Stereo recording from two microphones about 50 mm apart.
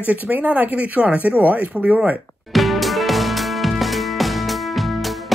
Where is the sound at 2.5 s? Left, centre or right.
Centre.